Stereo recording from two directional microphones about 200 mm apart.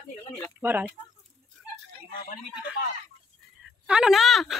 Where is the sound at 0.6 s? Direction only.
10° right (ahead or behind).